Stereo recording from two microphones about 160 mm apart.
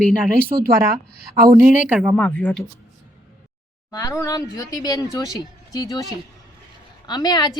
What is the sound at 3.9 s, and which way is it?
Speech, 20° left (ahead or behind).